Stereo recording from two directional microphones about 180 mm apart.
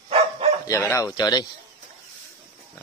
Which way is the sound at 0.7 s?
20° left (ahead or behind).